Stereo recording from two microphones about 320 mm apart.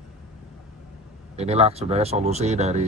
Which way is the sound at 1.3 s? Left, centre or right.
Centre.